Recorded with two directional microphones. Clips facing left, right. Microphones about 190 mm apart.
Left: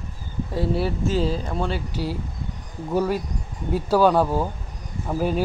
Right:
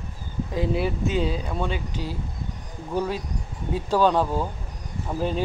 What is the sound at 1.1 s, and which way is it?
Speech, centre (ahead or behind).